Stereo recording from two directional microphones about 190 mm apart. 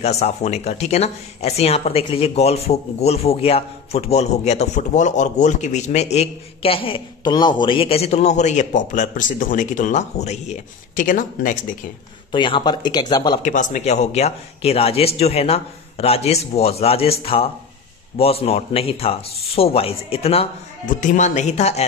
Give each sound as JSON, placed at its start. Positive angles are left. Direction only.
{"t": 0.0, "sound": "speech", "side_deg": 35}
{"t": 12.3, "sound": "speech", "side_deg": 25}
{"t": 13.4, "sound": "speech", "side_deg": 40}